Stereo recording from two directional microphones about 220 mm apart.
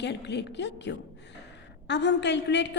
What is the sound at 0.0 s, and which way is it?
A woman's voice, 50° left (ahead or behind).